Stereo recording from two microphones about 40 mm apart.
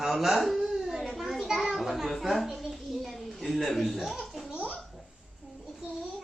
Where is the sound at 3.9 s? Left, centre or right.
Centre.